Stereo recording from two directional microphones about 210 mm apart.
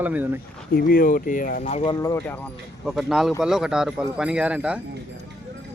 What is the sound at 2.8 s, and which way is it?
Speech, centre (ahead or behind).